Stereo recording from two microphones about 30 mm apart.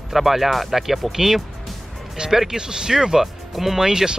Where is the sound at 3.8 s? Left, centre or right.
Right.